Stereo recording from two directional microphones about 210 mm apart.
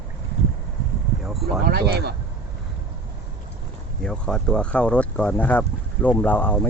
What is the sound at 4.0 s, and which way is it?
Speech, 5° left (ahead or behind).